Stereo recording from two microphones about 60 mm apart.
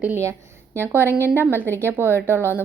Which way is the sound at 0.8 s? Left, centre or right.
Right.